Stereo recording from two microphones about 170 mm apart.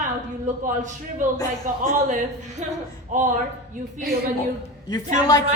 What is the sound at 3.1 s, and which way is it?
Speech, 50° right (ahead or behind).